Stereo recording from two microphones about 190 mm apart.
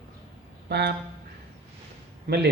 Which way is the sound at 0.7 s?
60° right (ahead or behind).